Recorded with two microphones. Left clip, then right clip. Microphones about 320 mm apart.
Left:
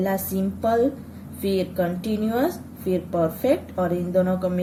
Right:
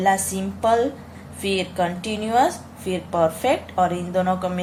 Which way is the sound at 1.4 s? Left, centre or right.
Right.